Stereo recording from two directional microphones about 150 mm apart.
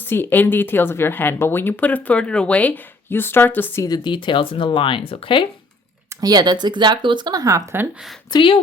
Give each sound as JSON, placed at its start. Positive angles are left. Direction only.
{"t": 0.1, "sound": "speech", "side_deg": 15}
{"t": 3.8, "sound": "speech", "side_deg": 30}
{"t": 6.1, "sound": "speech", "side_deg": -25}
{"t": 8.3, "sound": "speech", "side_deg": 35}